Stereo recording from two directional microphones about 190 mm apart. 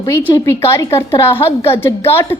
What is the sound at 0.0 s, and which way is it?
A woman's voice, 10° left (ahead or behind).